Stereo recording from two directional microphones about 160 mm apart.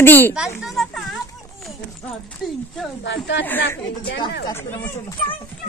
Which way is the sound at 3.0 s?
90° left.